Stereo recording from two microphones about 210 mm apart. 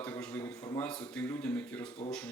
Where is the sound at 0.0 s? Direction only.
5° left (ahead or behind).